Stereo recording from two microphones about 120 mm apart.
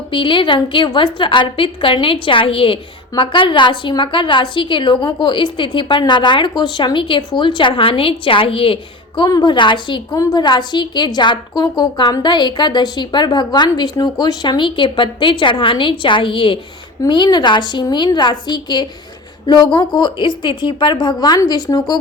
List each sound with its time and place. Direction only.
0.1 s a woman's voice: 45° left (ahead or behind)
9.2 s a woman's voice: 40° left (ahead or behind)